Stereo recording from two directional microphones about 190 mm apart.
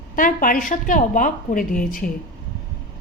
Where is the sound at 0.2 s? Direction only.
45° left (ahead or behind).